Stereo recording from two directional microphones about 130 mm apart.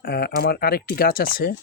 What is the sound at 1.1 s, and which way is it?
Speech, 90° left.